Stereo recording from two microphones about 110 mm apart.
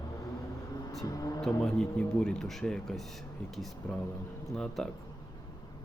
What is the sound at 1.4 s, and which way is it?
Speech, 5° left (ahead or behind).